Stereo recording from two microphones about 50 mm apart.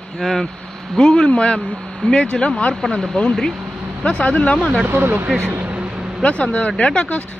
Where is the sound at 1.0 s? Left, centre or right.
Centre.